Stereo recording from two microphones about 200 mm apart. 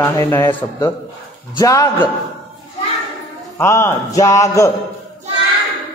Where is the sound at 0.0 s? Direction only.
10° left (ahead or behind).